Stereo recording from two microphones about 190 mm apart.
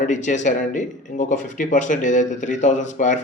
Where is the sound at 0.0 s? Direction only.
40° left (ahead or behind).